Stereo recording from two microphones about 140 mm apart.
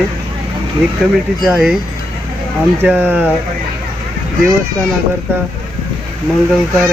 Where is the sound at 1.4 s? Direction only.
5° right (ahead or behind).